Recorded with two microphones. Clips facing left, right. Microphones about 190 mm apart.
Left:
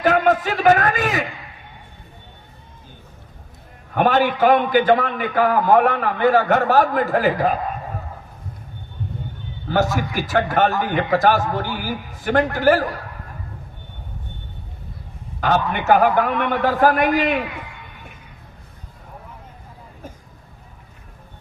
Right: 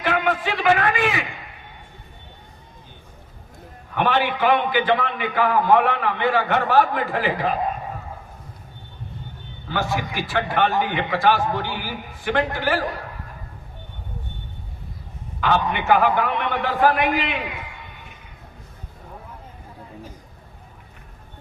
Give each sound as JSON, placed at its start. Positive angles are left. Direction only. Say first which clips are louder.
{"t": 0.0, "sound": "a sound", "louder": "left 5 dB", "side_deg": 40}
{"t": 3.9, "sound": "a man's voice", "louder": "left 4 dB", "side_deg": 45}
{"t": 9.6, "sound": "a man's voice", "louder": "left 5 dB", "side_deg": 40}
{"t": 15.4, "sound": "a man's voice", "louder": "left 1 dB", "side_deg": 40}